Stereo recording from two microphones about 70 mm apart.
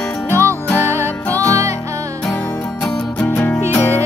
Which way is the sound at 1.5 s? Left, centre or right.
Right.